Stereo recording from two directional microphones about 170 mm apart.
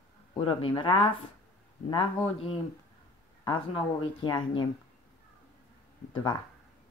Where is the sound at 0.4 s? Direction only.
30° left (ahead or behind).